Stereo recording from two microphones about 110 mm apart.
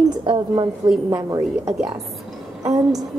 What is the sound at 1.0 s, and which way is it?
Speech, 30° right (ahead or behind).